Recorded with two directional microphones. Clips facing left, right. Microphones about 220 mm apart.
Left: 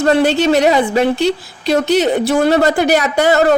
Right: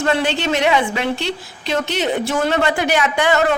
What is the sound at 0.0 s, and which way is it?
A woman's voice, 40° left (ahead or behind).